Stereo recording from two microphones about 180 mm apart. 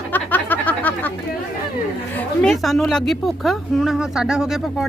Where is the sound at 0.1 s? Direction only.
10° left (ahead or behind).